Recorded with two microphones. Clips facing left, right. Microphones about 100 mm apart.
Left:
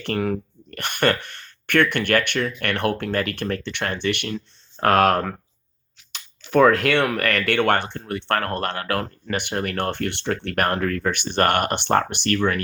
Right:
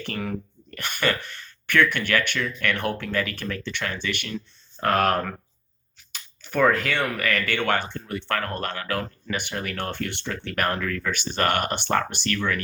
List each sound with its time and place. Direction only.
0.0 s speech: 65° left (ahead or behind)
6.5 s speech: 60° left (ahead or behind)